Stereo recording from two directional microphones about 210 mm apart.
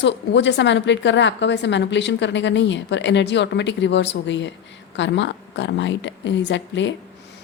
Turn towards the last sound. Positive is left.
turn(degrees=60)  # may be behind; listen again after turning